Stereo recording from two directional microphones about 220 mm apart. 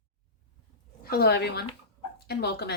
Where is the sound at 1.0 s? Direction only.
45° left (ahead or behind).